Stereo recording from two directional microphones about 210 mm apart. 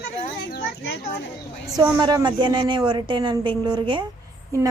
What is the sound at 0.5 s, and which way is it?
Children playing, 50° left (ahead or behind).